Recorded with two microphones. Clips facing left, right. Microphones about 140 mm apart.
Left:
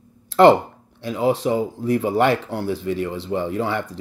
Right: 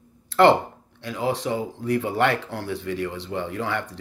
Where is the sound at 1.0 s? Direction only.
20° left (ahead or behind).